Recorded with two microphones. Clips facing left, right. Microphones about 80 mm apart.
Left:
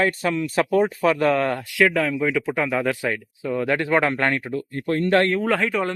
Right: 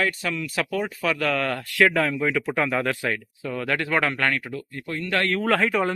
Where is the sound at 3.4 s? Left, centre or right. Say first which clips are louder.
Left 4 dB; centre; by 5.1 s left.